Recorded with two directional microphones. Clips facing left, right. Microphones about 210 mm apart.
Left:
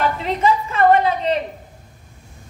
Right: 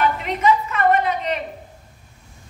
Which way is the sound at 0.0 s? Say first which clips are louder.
Left 1 dB; 30° left (ahead or behind).